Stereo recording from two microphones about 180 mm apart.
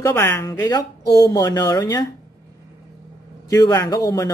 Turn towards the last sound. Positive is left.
turn(degrees=20)  # may be behind; listen again after turning